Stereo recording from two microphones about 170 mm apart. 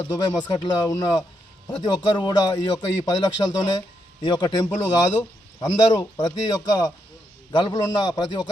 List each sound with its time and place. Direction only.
0.1 s a man's voice: 20° left (ahead or behind)